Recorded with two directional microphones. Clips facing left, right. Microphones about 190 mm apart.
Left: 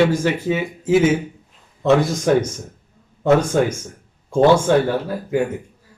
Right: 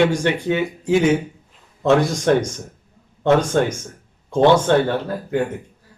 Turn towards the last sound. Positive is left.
turn(degrees=5)  # may be behind; listen again after turning